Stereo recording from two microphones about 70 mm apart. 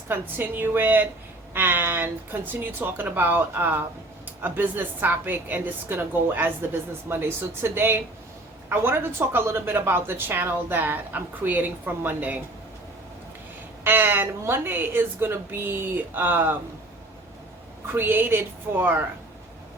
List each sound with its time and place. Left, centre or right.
0.1 s a woman's voice: right
13.8 s a woman's voice: right
17.9 s a woman's voice: right